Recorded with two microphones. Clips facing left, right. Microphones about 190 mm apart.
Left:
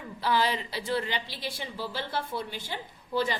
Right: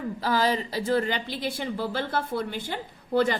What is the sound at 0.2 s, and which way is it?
A woman's voice, 40° right (ahead or behind).